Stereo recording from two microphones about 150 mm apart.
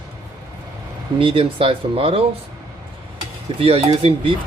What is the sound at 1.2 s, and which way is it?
Speech, 35° right (ahead or behind).